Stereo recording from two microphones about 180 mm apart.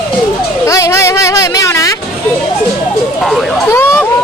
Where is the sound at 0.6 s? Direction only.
15° left (ahead or behind).